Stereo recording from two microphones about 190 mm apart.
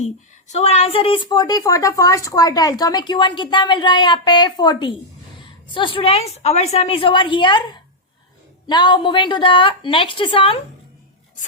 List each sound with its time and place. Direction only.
0.0 s a woman's voice: 35° left (ahead or behind)